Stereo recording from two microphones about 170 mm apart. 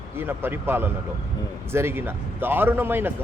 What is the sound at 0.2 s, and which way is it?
A man's voice, 10° right (ahead or behind).